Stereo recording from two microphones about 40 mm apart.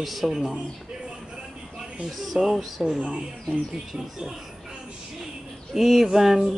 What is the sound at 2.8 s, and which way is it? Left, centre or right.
Speech, centre.